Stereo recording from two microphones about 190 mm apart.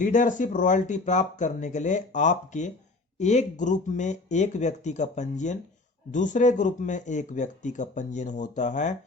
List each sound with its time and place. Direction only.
0.0 s speech: 40° left (ahead or behind)